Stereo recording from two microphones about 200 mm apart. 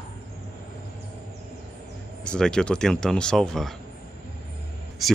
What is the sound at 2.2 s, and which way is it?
Speech, 5° left (ahead or behind).